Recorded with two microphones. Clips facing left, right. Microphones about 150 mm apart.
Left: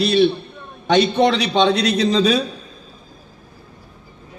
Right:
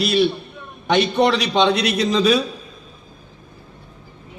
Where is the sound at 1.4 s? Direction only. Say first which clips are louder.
Left 1 dB; 30° left (ahead or behind).